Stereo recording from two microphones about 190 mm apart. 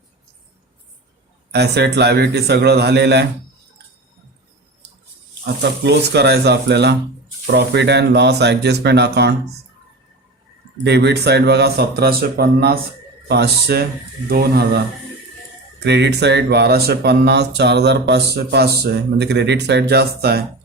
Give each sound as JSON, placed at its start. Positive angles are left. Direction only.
{"t": 1.5, "sound": "speech", "side_deg": -60}
{"t": 5.8, "sound": "speech", "side_deg": -60}
{"t": 10.8, "sound": "speech", "side_deg": -60}